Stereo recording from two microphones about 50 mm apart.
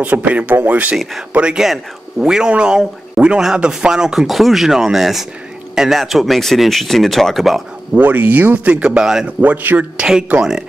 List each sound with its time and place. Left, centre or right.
0.0 s speech: right
1.3 s speech: centre
4.3 s speech: centre
7.9 s speech: right
8.9 s speech: centre
9.4 s speech: right